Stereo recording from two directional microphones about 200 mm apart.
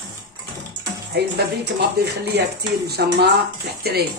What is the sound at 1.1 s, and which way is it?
Speech, 55° right (ahead or behind).